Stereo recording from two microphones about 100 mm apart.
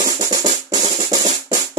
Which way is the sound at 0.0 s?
40° right (ahead or behind).